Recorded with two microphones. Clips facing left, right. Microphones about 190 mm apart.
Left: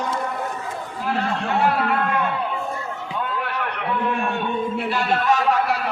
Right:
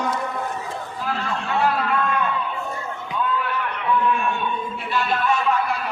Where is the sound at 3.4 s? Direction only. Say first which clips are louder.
Even; 65° left (ahead or behind).